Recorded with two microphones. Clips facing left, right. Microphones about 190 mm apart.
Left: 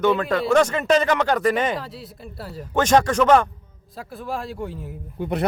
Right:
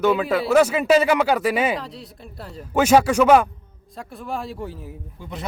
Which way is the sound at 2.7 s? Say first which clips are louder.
Right 2 dB; 10° right (ahead or behind).